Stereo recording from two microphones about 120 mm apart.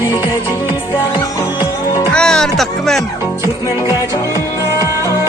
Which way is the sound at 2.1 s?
5° left (ahead or behind).